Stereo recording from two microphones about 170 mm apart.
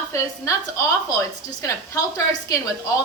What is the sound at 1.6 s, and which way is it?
A woman's voice, 20° left (ahead or behind).